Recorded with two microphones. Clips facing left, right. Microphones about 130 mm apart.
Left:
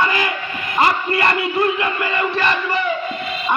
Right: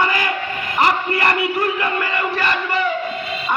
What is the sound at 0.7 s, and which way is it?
Speech, 20° left (ahead or behind).